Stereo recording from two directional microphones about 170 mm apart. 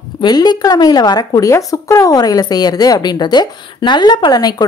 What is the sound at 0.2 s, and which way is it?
A woman's voice, 25° left (ahead or behind).